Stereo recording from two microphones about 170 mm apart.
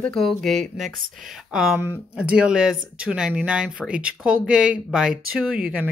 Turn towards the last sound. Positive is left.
turn(degrees=-5)  # may be behind; listen again after turning